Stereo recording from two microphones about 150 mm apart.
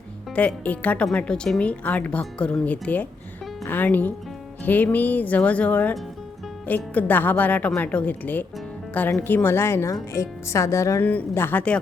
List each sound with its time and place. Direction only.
0.3 s speech: 10° left (ahead or behind)